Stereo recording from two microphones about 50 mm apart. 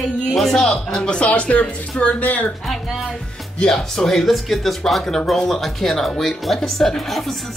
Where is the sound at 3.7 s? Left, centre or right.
Centre.